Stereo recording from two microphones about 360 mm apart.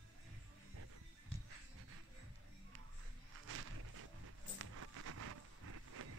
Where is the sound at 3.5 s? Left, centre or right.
Right.